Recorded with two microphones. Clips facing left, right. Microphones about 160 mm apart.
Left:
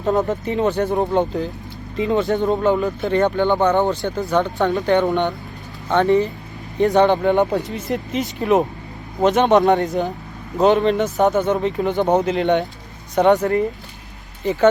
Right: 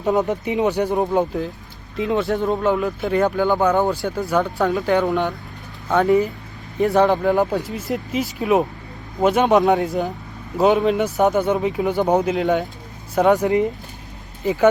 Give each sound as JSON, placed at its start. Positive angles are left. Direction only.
{"t": 0.3, "sound": "speech", "side_deg": -15}
{"t": 13.4, "sound": "speech", "side_deg": -15}